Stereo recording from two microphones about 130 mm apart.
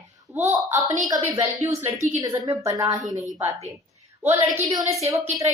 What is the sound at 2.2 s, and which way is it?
A woman's voice, 30° right (ahead or behind).